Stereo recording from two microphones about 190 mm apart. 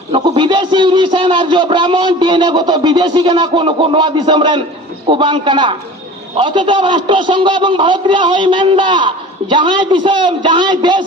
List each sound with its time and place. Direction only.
0.1 s a man's voice: 25° right (ahead or behind)